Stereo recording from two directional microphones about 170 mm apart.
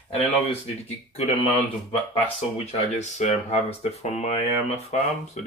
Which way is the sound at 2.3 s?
40° left (ahead or behind).